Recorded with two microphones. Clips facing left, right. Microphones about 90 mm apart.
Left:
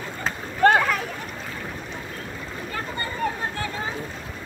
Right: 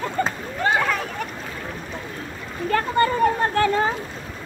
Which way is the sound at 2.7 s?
70° right (ahead or behind).